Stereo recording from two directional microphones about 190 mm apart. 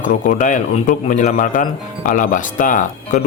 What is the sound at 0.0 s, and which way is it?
Speech, 40° left (ahead or behind).